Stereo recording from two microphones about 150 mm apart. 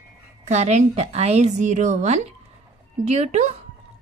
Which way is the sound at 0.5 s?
50° right (ahead or behind).